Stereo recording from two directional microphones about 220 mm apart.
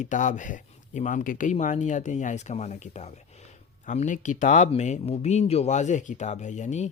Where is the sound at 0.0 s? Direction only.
35° left (ahead or behind).